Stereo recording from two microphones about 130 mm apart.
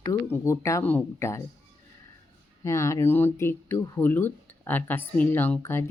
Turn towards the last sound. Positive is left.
turn(degrees=20)  # may be behind; listen again after turning